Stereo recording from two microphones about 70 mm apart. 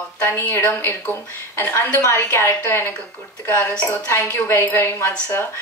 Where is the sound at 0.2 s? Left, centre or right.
Left.